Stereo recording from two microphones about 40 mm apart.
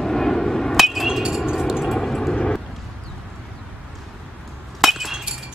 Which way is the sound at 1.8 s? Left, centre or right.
Centre.